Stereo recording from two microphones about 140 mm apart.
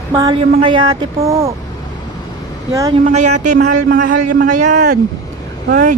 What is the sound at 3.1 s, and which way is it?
A man's voice, 55° right (ahead or behind).